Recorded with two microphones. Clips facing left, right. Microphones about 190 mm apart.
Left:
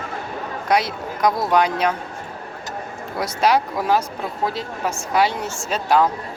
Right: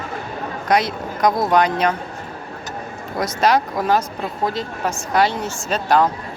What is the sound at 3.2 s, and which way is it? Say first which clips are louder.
Speech: right 1 dB; 10° left (ahead or behind).